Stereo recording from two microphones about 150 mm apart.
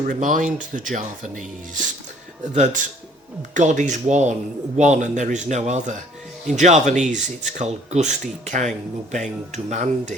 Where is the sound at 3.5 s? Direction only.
55° right (ahead or behind).